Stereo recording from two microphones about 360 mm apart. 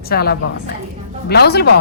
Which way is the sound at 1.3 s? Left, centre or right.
Left.